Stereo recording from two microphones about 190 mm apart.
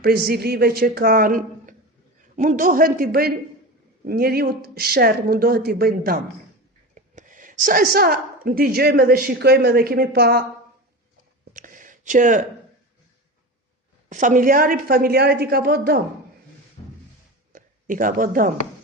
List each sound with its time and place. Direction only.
0.0 s a woman's voice: 55° right (ahead or behind)
6.9 s a woman's voice: 40° right (ahead or behind)
11.5 s a sound: 45° right (ahead or behind)
14.1 s a woman's voice: 40° right (ahead or behind)
17.5 s speech: 45° right (ahead or behind)